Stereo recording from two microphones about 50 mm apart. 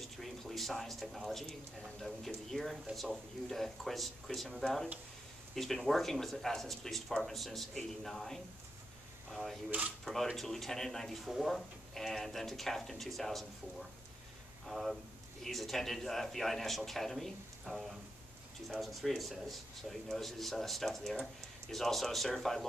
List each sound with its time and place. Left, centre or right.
0.0 s speech: centre
9.7 s speech: right
10.0 s speech: centre
14.7 s speech: centre